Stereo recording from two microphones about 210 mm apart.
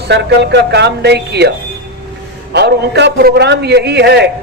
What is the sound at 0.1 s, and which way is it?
Speech, 55° right (ahead or behind).